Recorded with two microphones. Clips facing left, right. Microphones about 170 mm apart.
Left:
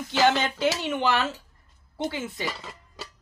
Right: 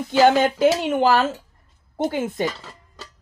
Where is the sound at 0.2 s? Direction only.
50° right (ahead or behind).